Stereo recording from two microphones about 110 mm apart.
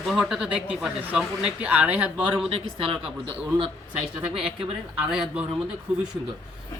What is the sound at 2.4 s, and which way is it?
Speech, 60° right (ahead or behind).